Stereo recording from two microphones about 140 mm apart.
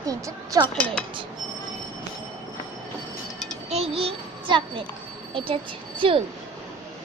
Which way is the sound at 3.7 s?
45° right (ahead or behind).